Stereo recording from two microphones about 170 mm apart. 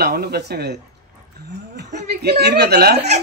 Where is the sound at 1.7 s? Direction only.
75° right (ahead or behind).